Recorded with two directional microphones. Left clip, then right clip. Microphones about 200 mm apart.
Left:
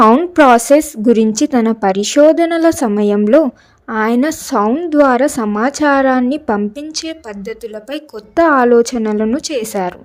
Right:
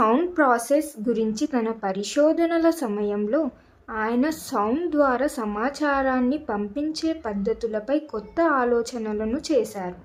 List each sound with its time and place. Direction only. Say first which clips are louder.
0.0 s a sound: left 11 dB; 25° left (ahead or behind)
0.3 s a woman's voice: left 12 dB; 40° left (ahead or behind)
4.6 s a woman's voice: left 10 dB; 25° left (ahead or behind); by 9.9 s 40° left (ahead or behind)